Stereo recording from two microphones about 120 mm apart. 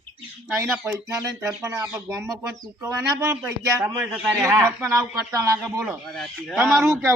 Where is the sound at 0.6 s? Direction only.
20° right (ahead or behind).